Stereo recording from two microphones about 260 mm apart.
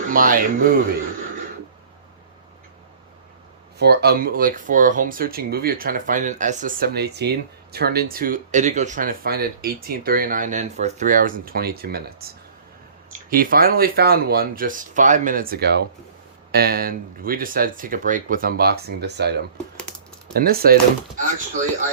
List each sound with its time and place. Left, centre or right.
0.1 s speech: right
3.8 s speech: right
13.3 s speech: right